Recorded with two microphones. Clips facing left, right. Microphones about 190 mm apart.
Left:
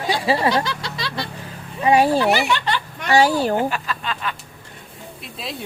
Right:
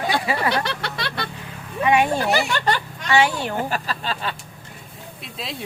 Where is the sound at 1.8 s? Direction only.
35° left (ahead or behind).